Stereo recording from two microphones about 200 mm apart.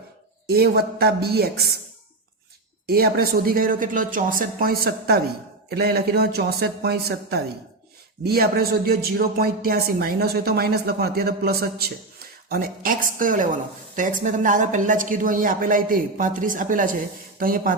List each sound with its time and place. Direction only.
0.4 s speech: 50° right (ahead or behind)
2.8 s speech: 50° right (ahead or behind)